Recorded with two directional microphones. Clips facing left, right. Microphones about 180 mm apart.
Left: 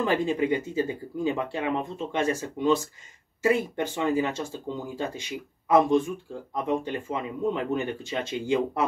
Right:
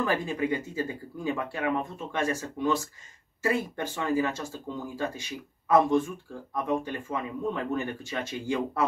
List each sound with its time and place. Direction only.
0.0 s speech: 20° left (ahead or behind)